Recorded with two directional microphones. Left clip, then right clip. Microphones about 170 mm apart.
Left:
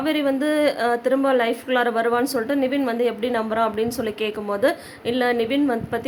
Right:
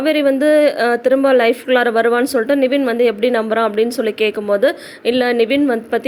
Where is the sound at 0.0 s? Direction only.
25° right (ahead or behind).